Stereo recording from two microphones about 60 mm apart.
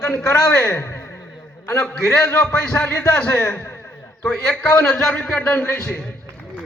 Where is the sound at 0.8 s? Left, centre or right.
Left.